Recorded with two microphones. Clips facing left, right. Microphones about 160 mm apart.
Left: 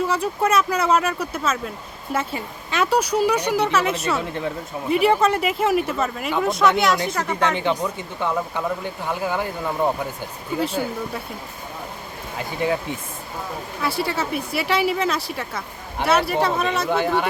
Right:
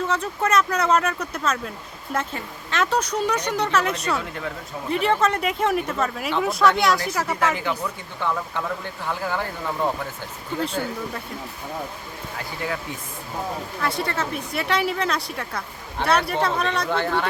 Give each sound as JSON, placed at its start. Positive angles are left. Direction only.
{"t": 0.0, "sound": "speech", "side_deg": 10}
{"t": 7.5, "sound": "speech", "side_deg": 25}
{"t": 10.6, "sound": "speech", "side_deg": 5}
{"t": 12.4, "sound": "speech", "side_deg": 20}
{"t": 13.8, "sound": "speech", "side_deg": 5}